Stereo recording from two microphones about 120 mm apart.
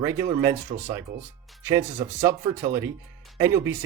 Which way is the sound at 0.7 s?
70° right (ahead or behind).